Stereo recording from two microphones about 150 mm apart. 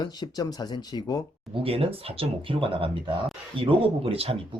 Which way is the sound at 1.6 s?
40° right (ahead or behind).